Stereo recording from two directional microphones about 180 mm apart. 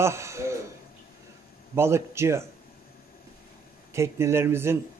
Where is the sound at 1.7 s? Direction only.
15° right (ahead or behind).